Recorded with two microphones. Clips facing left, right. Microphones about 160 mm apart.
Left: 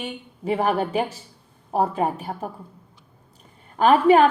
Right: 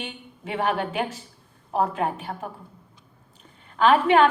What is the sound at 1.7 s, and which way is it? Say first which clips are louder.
Speech: left 2 dB; 40° left (ahead or behind).